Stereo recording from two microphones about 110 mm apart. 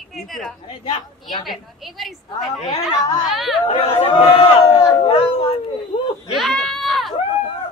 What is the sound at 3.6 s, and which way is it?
A woman's voice, 60° left (ahead or behind).